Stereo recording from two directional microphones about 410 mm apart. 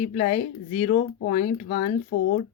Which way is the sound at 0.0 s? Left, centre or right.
Centre.